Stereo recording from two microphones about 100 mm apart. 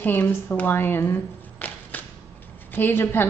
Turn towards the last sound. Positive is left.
turn(degrees=20)  # may be behind; listen again after turning